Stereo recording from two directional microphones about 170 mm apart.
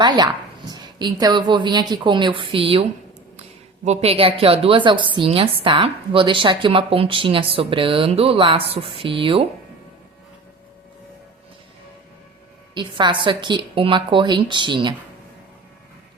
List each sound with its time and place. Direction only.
0.0 s a woman's voice: 25° right (ahead or behind)
3.8 s a woman's voice: 35° right (ahead or behind)
12.7 s a woman's voice: 30° right (ahead or behind)